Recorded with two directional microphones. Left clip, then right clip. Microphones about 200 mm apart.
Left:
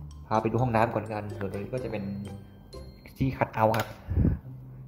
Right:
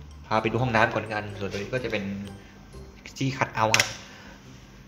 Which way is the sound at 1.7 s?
10° left (ahead or behind).